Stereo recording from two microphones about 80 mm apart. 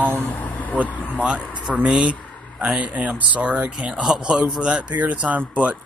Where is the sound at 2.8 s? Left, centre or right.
Centre.